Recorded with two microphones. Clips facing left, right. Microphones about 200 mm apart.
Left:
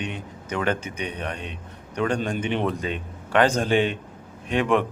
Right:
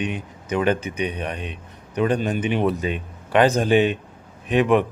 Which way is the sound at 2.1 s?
5° right (ahead or behind).